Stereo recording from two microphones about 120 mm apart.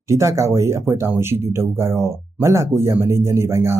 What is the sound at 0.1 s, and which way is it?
Speech, 25° right (ahead or behind).